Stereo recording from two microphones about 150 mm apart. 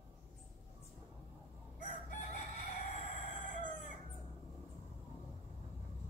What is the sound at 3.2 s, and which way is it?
Crowing, 55° left (ahead or behind).